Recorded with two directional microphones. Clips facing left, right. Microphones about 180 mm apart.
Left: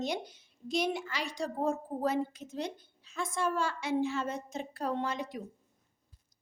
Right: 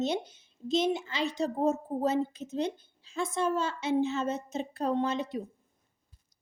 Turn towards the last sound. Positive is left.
turn(degrees=-25)  # may be behind; listen again after turning